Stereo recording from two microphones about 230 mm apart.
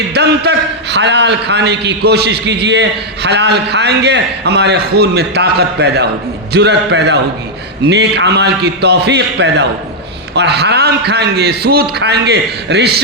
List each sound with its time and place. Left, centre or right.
0.1 s a man's voice: right